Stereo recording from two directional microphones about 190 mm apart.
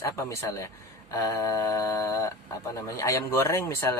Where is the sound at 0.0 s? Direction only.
15° left (ahead or behind).